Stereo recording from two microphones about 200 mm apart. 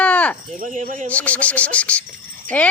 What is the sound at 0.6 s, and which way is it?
Speech, 40° right (ahead or behind).